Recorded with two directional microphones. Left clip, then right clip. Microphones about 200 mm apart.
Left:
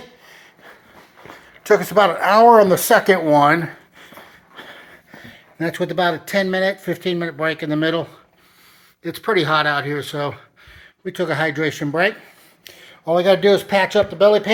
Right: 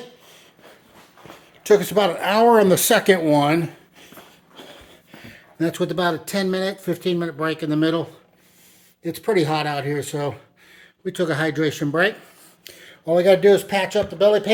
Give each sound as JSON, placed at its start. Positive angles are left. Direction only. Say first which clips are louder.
{"t": 1.3, "sound": "speech", "louder": "left 1 dB", "side_deg": -25}
{"t": 4.5, "sound": "a sound", "louder": "left 4 dB", "side_deg": -25}
{"t": 5.2, "sound": "speech", "louder": "even", "side_deg": -15}